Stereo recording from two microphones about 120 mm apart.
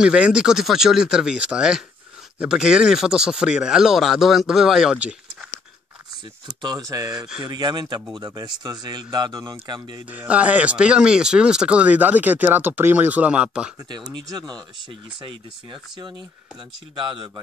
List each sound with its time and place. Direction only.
0.0 s speech: 5° right (ahead or behind)
6.4 s speech: 35° right (ahead or behind)
10.1 s speech: 10° right (ahead or behind)
13.8 s speech: 35° right (ahead or behind)